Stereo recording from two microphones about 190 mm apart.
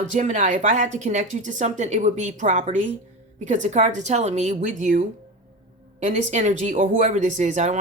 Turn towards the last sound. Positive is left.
turn(degrees=-40)  # may be behind; listen again after turning